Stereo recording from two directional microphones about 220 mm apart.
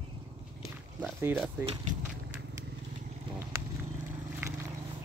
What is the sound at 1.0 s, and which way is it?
Speech, 10° right (ahead or behind).